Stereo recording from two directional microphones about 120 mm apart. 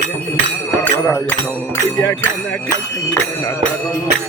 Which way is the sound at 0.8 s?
15° left (ahead or behind).